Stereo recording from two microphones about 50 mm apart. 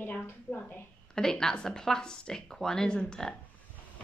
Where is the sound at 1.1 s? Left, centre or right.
Centre.